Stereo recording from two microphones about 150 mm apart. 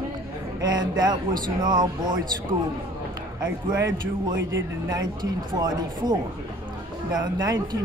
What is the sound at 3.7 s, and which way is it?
Speech, 25° right (ahead or behind).